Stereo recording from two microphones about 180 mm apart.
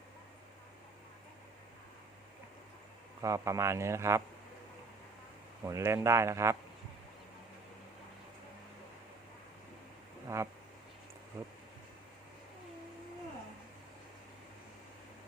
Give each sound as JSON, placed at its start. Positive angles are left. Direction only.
{"t": 3.2, "sound": "speech", "side_deg": -15}
{"t": 5.6, "sound": "speech", "side_deg": -15}
{"t": 10.2, "sound": "duck", "side_deg": -15}
{"t": 11.3, "sound": "speech", "side_deg": -15}